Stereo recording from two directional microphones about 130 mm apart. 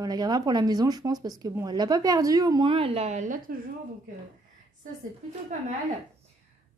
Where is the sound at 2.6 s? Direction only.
45° right (ahead or behind); by 3.5 s 90° right.